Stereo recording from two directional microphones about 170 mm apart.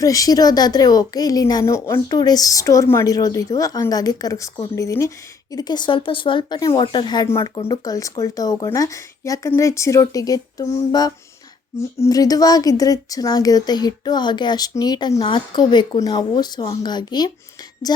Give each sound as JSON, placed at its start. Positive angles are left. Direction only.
{"t": 0.0, "sound": "a woman's voice", "side_deg": 20}
{"t": 11.9, "sound": "a woman's voice", "side_deg": 20}